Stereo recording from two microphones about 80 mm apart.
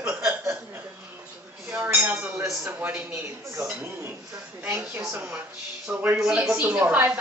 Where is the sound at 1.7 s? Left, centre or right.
Right.